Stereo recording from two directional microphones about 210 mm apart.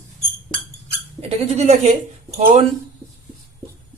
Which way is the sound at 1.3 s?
30° right (ahead or behind).